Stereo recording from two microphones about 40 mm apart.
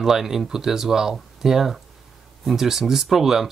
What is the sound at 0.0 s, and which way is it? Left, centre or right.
Speech, centre.